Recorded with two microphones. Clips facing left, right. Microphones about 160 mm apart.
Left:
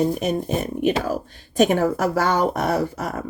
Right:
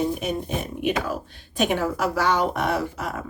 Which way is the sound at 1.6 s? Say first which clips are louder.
Left 5 dB; 45° left (ahead or behind).